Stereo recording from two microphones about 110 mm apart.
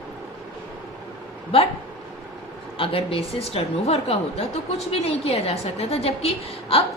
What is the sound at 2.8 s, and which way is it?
A woman's voice, 55° left (ahead or behind).